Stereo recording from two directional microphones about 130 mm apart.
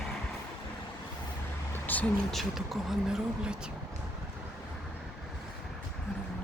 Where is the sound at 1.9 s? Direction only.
15° left (ahead or behind).